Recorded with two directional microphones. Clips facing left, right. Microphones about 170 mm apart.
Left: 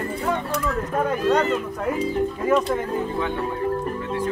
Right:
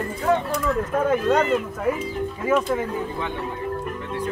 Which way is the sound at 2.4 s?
5° right (ahead or behind).